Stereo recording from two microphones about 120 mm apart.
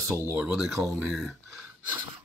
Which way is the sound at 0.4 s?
5° right (ahead or behind).